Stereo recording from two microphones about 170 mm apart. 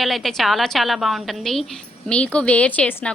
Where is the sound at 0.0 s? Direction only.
Centre (ahead or behind).